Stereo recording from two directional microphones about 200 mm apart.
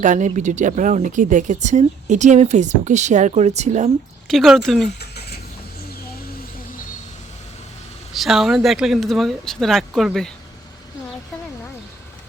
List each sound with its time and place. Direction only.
0.0 s speech: 40° right (ahead or behind)
4.3 s speech: centre (ahead or behind)
4.9 s rodents: 55° left (ahead or behind)
8.1 s speech: centre (ahead or behind)